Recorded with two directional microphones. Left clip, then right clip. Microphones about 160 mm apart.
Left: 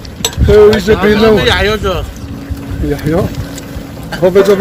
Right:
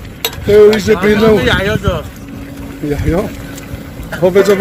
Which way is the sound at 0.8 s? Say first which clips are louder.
Left 2 dB; 10° right (ahead or behind).